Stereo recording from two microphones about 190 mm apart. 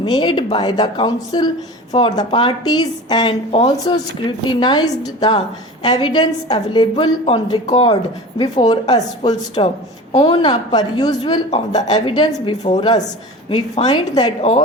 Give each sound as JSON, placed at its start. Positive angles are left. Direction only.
{"t": 0.0, "sound": "a woman's voice", "side_deg": 25}
{"t": 11.5, "sound": "a woman's voice", "side_deg": 35}